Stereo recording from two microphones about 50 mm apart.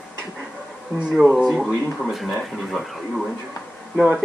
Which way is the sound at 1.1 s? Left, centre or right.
Centre.